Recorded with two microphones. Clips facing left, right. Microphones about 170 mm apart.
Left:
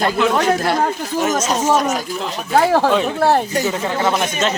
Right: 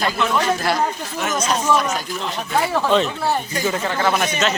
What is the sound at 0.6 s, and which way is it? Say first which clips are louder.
Speech: left 3 dB; 50° left (ahead or behind).